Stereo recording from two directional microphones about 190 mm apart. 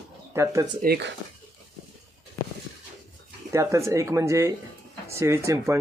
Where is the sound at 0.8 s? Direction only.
60° right (ahead or behind).